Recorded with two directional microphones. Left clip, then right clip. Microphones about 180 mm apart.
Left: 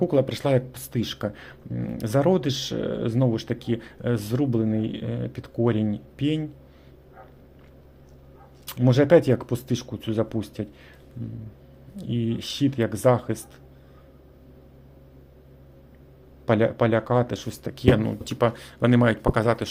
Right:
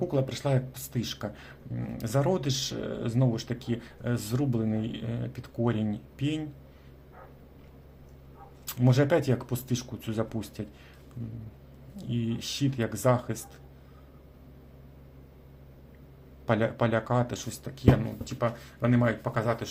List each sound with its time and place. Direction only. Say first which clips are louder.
0.0 s speech: left 7 dB; 40° left (ahead or behind)
8.6 s speech: left 5 dB; 30° left (ahead or behind)
11.9 s speech: left 5 dB; 30° left (ahead or behind)
16.5 s speech: left 6 dB; 30° left (ahead or behind); by 19.6 s 50° left (ahead or behind)